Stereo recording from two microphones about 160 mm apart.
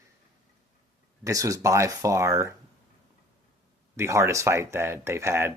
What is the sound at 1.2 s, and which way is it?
Speech, 20° right (ahead or behind).